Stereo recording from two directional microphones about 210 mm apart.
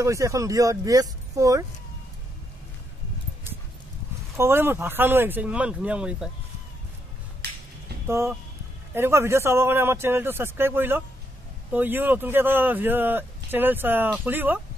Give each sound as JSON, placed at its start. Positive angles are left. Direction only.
{"t": 0.0, "sound": "speech", "side_deg": -15}
{"t": 4.4, "sound": "speech", "side_deg": -10}
{"t": 7.4, "sound": "a sound", "side_deg": -50}
{"t": 8.1, "sound": "speech", "side_deg": -15}